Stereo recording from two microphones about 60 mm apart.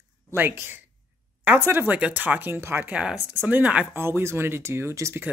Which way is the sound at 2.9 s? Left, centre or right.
Centre.